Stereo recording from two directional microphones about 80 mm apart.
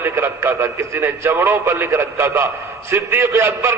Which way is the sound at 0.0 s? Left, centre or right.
Right.